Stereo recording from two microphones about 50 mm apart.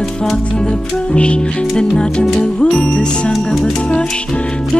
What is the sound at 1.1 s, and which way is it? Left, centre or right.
Music, centre.